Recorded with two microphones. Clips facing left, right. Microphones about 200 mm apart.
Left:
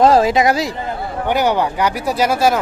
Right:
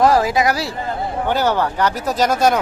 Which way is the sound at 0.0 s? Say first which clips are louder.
Left 3 dB; 25° left (ahead or behind).